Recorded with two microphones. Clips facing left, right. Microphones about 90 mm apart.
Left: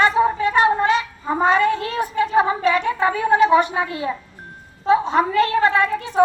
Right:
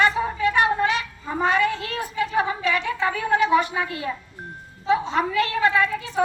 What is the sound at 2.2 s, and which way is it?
Speech, 50° left (ahead or behind).